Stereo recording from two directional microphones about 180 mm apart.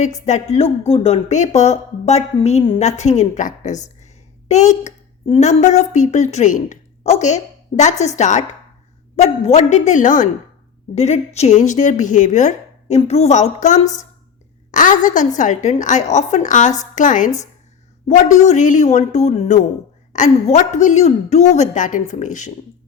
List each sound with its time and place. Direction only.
0.0 s a woman's voice: 40° left (ahead or behind)
18.3 s a woman's voice: 40° left (ahead or behind)